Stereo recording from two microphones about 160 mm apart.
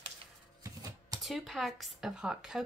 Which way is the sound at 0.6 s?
20° right (ahead or behind).